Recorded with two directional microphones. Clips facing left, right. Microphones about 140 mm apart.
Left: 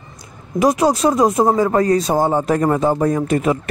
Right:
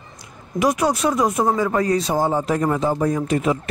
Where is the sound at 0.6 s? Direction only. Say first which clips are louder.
Left 4 dB; 35° left (ahead or behind).